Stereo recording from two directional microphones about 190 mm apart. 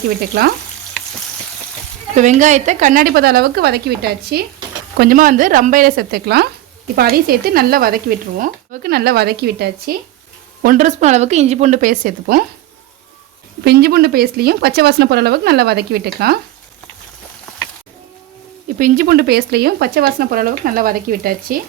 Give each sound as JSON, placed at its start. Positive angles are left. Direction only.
{"t": 2.1, "sound": "speech", "side_deg": -40}
{"t": 10.6, "sound": "a woman's voice", "side_deg": -45}
{"t": 13.7, "sound": "speech", "side_deg": -55}
{"t": 18.8, "sound": "speech", "side_deg": -45}